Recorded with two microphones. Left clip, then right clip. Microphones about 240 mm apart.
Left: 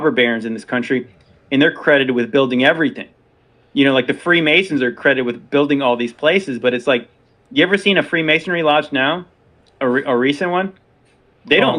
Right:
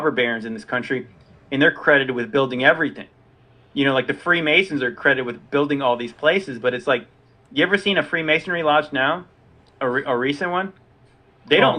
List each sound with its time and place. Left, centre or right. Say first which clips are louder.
0.0 s speech: left 5 dB; left